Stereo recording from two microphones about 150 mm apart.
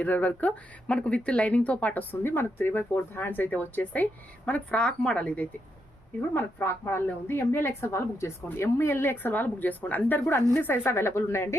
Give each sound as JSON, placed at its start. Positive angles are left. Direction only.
{"t": 0.0, "sound": "speech", "side_deg": 10}